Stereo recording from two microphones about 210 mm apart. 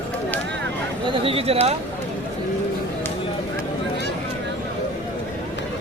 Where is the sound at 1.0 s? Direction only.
25° right (ahead or behind).